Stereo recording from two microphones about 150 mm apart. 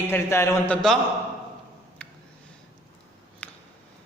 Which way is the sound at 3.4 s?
10° left (ahead or behind).